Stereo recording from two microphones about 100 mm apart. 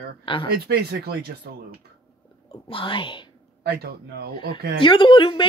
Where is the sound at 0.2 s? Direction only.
60° left (ahead or behind).